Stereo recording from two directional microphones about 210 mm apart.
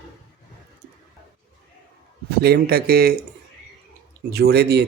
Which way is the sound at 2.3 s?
50° right (ahead or behind).